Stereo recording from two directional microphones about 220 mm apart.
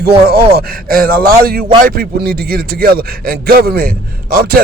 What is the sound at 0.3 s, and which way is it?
A man's voice, 45° right (ahead or behind).